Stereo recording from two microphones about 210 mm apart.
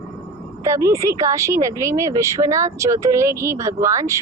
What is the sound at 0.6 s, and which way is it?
Speech, 15° right (ahead or behind).